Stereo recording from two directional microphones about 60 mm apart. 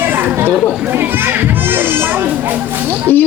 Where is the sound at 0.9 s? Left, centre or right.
Right.